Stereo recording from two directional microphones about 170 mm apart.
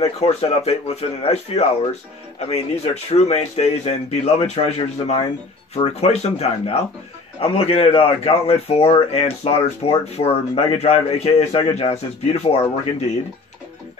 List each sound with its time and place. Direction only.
0.0 s a man's voice: 35° left (ahead or behind)